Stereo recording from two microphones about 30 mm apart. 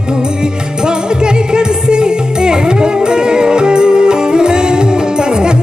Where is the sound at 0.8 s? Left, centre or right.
Right.